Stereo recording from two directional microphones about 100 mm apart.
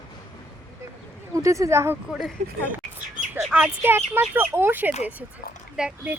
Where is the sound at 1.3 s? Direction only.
30° right (ahead or behind).